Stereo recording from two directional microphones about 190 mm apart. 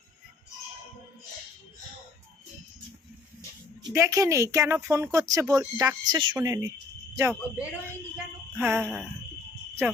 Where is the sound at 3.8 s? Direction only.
15° right (ahead or behind).